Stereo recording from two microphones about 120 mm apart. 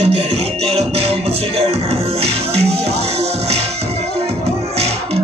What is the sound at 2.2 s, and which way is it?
Music, 60° right (ahead or behind).